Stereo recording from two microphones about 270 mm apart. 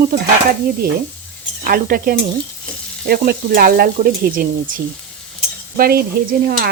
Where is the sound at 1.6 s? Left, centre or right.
Right.